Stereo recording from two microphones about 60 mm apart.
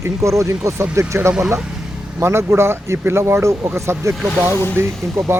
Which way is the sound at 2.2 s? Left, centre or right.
Right.